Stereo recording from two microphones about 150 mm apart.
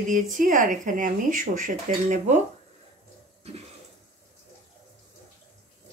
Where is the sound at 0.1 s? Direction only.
60° right (ahead or behind).